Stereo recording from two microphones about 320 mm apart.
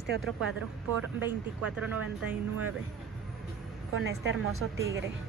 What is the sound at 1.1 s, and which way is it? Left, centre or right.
Speech, centre.